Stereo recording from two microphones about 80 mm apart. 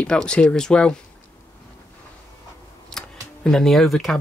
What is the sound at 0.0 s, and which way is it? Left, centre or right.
Speech, centre.